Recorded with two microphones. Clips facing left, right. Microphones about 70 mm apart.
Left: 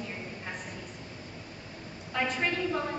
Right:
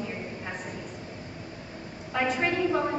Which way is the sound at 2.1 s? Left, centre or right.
Centre.